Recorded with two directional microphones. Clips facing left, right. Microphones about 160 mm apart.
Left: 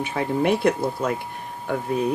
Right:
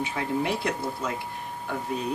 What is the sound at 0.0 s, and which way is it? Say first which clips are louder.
Speech: left 5 dB; 55° left (ahead or behind).